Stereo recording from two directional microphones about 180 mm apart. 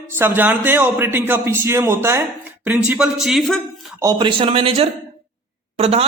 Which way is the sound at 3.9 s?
25° right (ahead or behind).